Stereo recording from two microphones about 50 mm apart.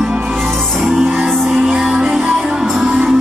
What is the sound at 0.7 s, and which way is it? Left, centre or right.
Music, centre.